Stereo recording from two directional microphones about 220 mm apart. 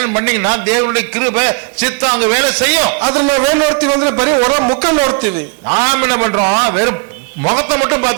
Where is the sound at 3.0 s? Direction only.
25° right (ahead or behind).